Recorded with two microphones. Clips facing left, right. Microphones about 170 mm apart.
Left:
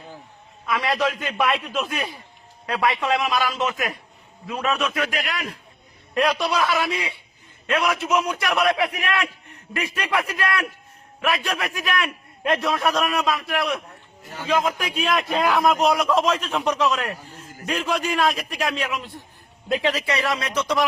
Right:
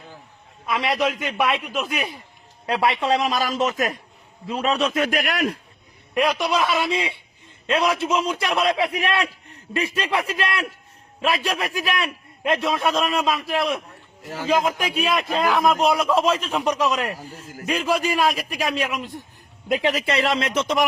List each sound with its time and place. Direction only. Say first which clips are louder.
0.6 s a man's voice: right 1 dB; 25° right (ahead or behind); by 1.9 s 5° right (ahead or behind)
1.9 s a man's voice: right 1 dB; 20° right (ahead or behind); by 3.9 s 40° right (ahead or behind)
4.4 s a man's voice: right 2 dB; 25° right (ahead or behind)
5.1 s a man's voice: right 6 dB; 55° right (ahead or behind)
6.4 s a man's voice: right 1 dB; 20° right (ahead or behind)
14.9 s a man's voice: left 2 dB; 5° right (ahead or behind)
17.1 s a man's voice: right 2 dB; 35° right (ahead or behind)
17.8 s a man's voice: right 1 dB; 10° right (ahead or behind)